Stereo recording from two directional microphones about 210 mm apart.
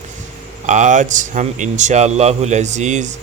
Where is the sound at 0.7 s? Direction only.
35° right (ahead or behind).